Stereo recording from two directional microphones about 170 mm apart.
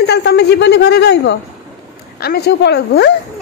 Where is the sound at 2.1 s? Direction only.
70° left (ahead or behind).